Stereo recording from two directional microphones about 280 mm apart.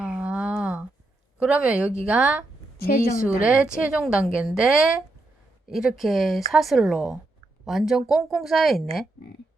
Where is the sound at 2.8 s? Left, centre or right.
Left.